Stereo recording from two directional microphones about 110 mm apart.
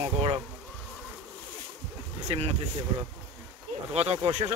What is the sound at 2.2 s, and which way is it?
Speech, 70° right (ahead or behind).